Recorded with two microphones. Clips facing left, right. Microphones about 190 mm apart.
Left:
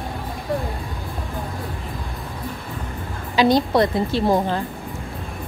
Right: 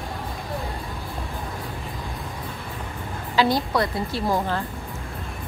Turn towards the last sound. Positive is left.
turn(degrees=25)  # may be behind; listen again after turning